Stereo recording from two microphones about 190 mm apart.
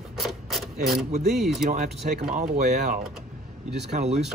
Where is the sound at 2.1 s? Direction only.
40° right (ahead or behind).